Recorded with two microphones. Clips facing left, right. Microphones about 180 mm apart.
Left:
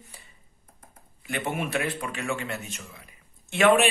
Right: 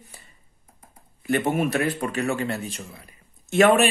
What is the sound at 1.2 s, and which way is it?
A man's voice, 40° right (ahead or behind).